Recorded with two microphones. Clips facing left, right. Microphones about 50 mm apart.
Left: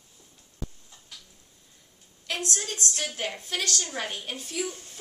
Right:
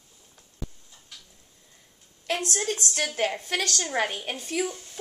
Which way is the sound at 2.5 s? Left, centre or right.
Right.